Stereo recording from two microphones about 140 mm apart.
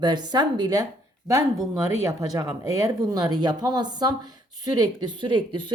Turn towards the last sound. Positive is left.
turn(degrees=-35)  # may be behind; listen again after turning